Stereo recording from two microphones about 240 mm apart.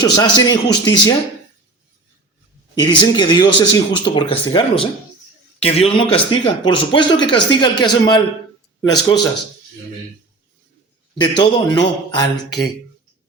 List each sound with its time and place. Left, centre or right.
0.0 s a man's voice: centre
2.7 s a man's voice: centre
11.2 s a man's voice: centre